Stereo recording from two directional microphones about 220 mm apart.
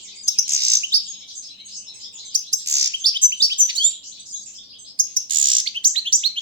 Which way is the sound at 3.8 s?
20° right (ahead or behind).